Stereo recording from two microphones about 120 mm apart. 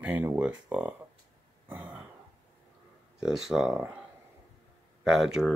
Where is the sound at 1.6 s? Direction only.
15° right (ahead or behind).